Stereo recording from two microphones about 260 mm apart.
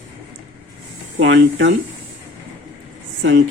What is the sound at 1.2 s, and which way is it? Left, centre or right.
Speech, right.